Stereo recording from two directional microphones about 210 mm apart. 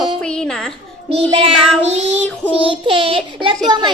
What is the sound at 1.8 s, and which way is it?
Child singing, 30° right (ahead or behind).